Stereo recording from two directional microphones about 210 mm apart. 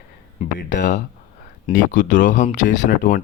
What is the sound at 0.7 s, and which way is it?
Speech, 35° left (ahead or behind).